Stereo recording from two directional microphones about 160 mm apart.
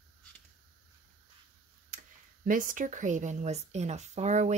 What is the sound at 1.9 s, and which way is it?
Tick-tock, 55° right (ahead or behind).